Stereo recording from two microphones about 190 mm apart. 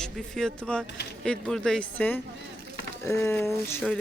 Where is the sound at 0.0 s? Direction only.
5° left (ahead or behind).